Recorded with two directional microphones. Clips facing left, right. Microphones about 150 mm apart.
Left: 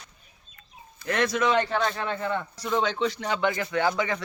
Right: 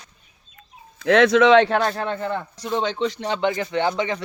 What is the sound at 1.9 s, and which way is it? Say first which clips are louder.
Speech: right 3 dB; 35° right (ahead or behind).